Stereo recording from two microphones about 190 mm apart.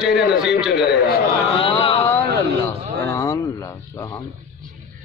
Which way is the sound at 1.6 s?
30° left (ahead or behind).